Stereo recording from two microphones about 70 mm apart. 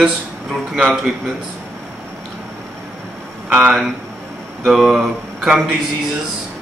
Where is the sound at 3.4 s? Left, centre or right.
Centre.